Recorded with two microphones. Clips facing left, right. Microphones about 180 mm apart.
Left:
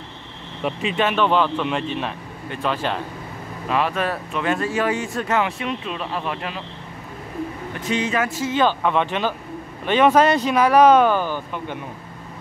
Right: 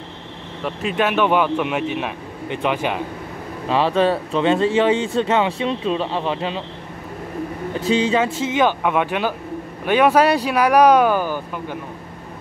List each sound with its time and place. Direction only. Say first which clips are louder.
0.7 s speech: right 1 dB; centre (ahead or behind)
3.6 s speech: right 5 dB; 30° right (ahead or behind)
7.8 s speech: right 4 dB; 30° right (ahead or behind)
8.5 s speech: right 1 dB; 15° right (ahead or behind)